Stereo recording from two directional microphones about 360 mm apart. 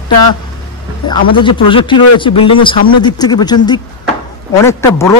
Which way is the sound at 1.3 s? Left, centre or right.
Centre.